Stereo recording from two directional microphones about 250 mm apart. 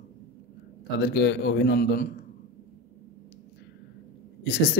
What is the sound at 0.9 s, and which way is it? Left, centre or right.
Speech, left.